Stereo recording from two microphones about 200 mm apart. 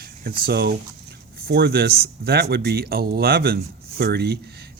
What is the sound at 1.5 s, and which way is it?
Speech, 55° right (ahead or behind).